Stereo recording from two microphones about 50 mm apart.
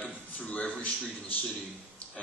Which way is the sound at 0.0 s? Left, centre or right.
Left.